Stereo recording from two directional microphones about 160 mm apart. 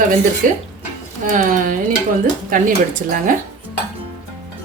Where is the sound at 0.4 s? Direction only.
60° right (ahead or behind).